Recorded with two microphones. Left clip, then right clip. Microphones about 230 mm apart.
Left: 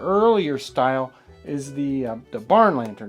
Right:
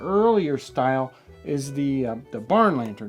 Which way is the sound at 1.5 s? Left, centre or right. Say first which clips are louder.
Right 1 dB; right.